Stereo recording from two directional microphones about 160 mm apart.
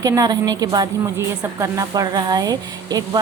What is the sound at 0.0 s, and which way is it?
Speech, 25° right (ahead or behind).